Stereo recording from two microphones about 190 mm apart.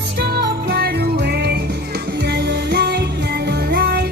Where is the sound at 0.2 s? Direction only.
55° right (ahead or behind).